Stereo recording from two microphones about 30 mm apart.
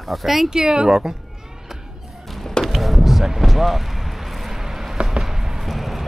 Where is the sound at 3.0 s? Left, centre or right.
Centre.